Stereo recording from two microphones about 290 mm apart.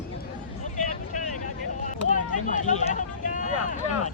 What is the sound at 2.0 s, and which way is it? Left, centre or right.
Vehicle, left.